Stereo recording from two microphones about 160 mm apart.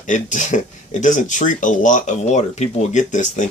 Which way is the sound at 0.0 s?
50° left (ahead or behind).